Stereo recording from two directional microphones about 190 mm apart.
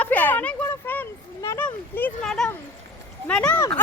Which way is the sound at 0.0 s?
10° left (ahead or behind).